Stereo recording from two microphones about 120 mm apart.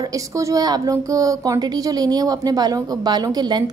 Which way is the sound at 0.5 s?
30° right (ahead or behind).